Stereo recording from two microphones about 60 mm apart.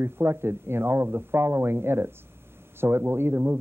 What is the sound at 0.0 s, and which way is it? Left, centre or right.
Speech, right.